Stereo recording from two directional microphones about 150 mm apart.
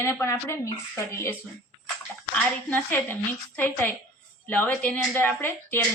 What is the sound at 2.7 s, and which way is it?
Speech, 10° left (ahead or behind).